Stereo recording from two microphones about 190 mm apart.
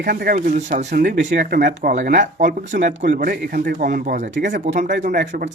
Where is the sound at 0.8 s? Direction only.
65° right (ahead or behind); by 4.2 s 45° right (ahead or behind).